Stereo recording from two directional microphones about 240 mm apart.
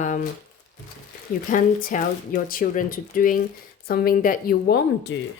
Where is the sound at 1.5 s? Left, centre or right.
Left.